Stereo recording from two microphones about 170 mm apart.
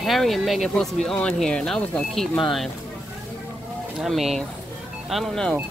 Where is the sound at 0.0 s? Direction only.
Centre (ahead or behind).